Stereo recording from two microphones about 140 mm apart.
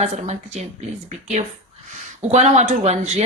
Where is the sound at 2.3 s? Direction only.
55° right (ahead or behind).